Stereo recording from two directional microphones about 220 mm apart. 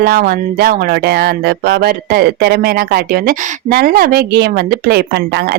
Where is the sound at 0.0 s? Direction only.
45° right (ahead or behind).